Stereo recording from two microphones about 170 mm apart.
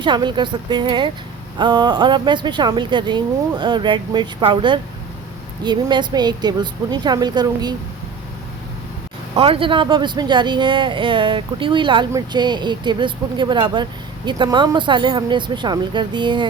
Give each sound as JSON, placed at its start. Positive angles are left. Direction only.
{"t": 0.0, "sound": "a woman's voice", "side_deg": -25}
{"t": 9.3, "sound": "a woman's voice", "side_deg": -35}